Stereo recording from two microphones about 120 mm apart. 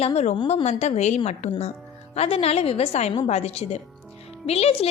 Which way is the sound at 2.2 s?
55° left (ahead or behind).